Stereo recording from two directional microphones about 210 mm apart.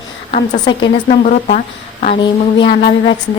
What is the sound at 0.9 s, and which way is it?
Speech, 35° left (ahead or behind).